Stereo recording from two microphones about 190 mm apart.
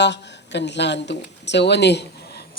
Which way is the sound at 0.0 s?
65° left (ahead or behind).